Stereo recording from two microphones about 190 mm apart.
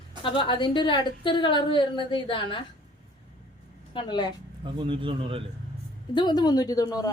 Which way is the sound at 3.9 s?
25° left (ahead or behind).